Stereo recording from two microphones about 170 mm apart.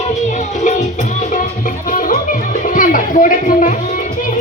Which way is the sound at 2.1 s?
50° left (ahead or behind).